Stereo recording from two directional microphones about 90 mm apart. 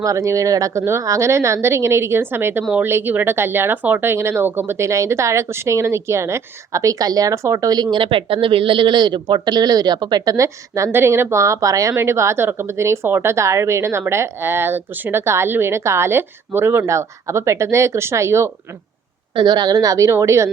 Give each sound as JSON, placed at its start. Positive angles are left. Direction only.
{"t": 0.0, "sound": "speech", "side_deg": -35}
{"t": 19.4, "sound": "speech", "side_deg": -55}